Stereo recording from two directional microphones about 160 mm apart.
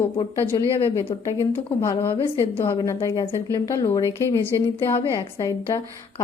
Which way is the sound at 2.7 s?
30° left (ahead or behind).